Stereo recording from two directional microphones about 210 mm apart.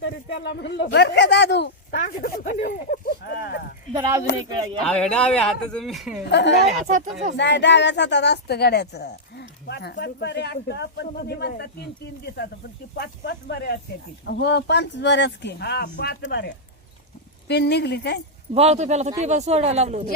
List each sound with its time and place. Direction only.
0.0 s speech: 55° left (ahead or behind)
3.9 s speech: 15° right (ahead or behind)
4.8 s speech: 5° left (ahead or behind)
6.2 s speech: 55° left (ahead or behind)
6.7 s speech: 35° right (ahead or behind)
7.3 s speech: 55° left (ahead or behind)
17.5 s speech: 50° left (ahead or behind)
18.5 s speech: 30° right (ahead or behind)